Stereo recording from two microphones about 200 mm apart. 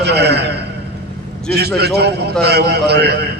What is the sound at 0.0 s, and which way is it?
Speech, 55° right (ahead or behind).